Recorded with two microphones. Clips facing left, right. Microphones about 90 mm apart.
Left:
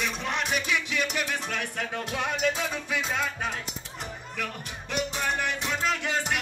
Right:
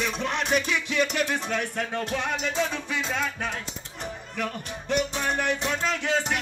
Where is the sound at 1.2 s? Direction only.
30° right (ahead or behind).